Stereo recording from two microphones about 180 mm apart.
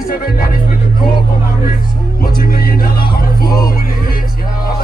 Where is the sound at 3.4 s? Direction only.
20° left (ahead or behind).